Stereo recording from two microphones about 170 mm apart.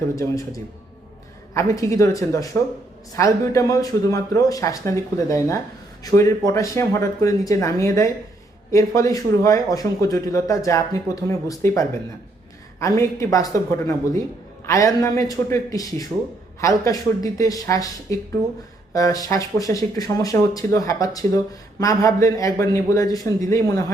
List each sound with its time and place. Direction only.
0.2 s speech: 20° left (ahead or behind)